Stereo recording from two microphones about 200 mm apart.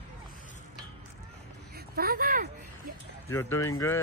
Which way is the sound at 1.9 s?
45° right (ahead or behind).